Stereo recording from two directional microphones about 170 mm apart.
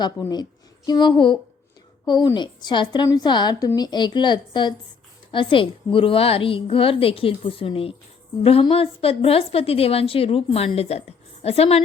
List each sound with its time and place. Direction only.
0.2 s a woman's voice: 25° left (ahead or behind)